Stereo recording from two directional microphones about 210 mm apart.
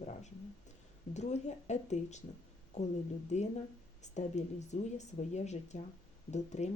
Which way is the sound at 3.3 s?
35° left (ahead or behind).